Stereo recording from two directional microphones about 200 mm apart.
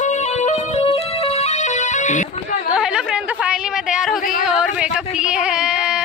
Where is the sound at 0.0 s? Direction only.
35° left (ahead or behind).